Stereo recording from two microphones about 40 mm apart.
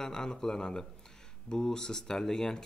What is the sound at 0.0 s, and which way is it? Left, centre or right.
Speech, centre.